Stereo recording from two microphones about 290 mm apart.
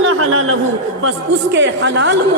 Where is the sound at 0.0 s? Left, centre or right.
Right.